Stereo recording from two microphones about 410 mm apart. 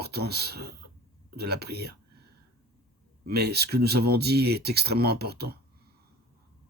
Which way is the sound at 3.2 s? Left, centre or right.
Right.